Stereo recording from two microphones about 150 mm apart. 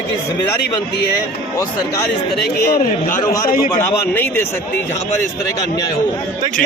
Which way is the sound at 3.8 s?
15° left (ahead or behind).